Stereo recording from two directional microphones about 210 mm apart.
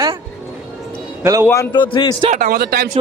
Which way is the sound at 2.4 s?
50° right (ahead or behind).